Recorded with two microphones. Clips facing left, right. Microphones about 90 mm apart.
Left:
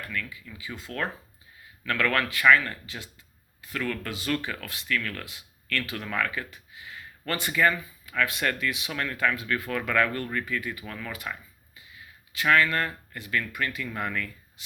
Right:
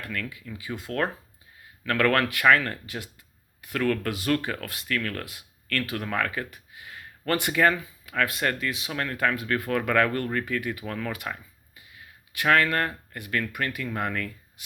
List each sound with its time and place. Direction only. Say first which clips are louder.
0.1 s speech: right 2 dB; 55° right (ahead or behind); by 8.1 s 75° right (ahead or behind)
8.1 s speech: right 1 dB; 45° right (ahead or behind)
9.1 s speech: right 2 dB; 50° right (ahead or behind)
13.8 s speech: right 2 dB; 45° right (ahead or behind)